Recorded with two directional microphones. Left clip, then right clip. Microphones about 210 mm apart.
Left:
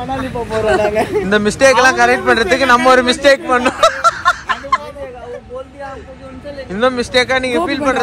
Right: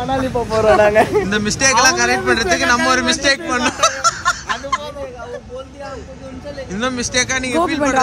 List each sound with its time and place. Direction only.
0.1 s a man's voice: 5° right (ahead or behind)
0.8 s speech: 20° right (ahead or behind)
1.2 s a man's voice: 5° right (ahead or behind)
6.7 s a man's voice: 5° right (ahead or behind)